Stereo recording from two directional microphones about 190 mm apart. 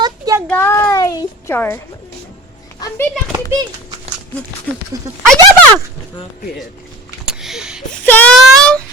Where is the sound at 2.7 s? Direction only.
20° left (ahead or behind).